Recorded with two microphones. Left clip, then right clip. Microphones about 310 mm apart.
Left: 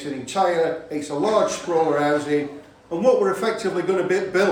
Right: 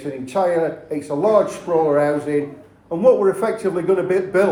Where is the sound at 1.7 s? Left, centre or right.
Centre.